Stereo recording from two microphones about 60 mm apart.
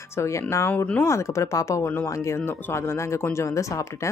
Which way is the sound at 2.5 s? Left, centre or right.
Left.